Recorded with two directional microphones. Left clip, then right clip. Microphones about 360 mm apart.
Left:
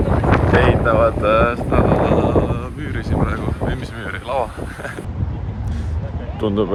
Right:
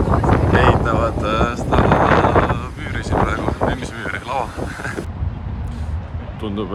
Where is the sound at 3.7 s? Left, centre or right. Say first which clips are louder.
Right 3 dB; centre.